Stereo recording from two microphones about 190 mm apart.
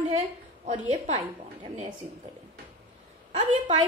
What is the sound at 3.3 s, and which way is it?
Speech, 30° right (ahead or behind).